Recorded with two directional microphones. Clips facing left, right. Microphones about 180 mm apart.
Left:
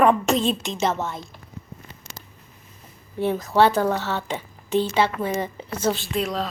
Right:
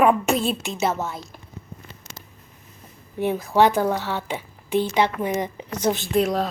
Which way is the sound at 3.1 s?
15° right (ahead or behind).